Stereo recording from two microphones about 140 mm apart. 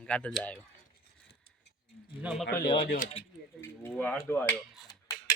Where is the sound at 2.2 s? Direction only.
Centre (ahead or behind).